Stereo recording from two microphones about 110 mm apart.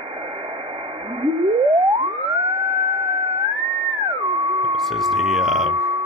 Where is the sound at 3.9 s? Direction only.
60° right (ahead or behind).